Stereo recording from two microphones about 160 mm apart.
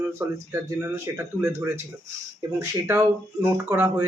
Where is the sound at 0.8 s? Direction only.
20° right (ahead or behind).